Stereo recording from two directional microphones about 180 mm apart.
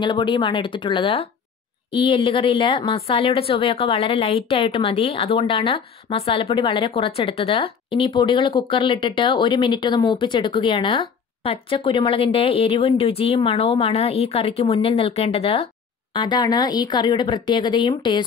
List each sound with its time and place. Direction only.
0.0 s a woman's voice: 25° left (ahead or behind)